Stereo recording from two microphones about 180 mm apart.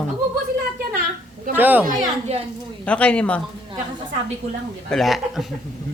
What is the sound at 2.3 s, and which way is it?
Speech, 35° right (ahead or behind).